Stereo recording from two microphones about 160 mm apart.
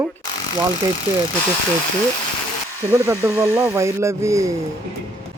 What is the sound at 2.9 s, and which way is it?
Speech, 15° right (ahead or behind).